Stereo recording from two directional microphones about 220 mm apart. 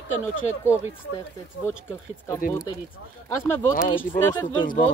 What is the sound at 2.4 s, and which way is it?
Speech, 40° left (ahead or behind).